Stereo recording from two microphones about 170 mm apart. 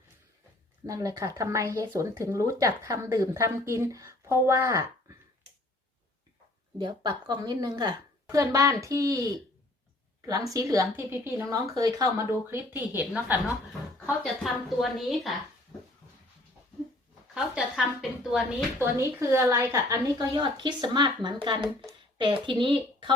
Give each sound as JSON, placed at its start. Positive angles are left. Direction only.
{"t": 0.9, "sound": "speech", "side_deg": -20}
{"t": 6.7, "sound": "a woman's voice", "side_deg": -25}
{"t": 14.4, "sound": "speech", "side_deg": 0}
{"t": 17.3, "sound": "speech", "side_deg": -5}
{"t": 18.9, "sound": "speech", "side_deg": -15}
{"t": 21.8, "sound": "a sound", "side_deg": -30}
{"t": 22.4, "sound": "speech", "side_deg": -30}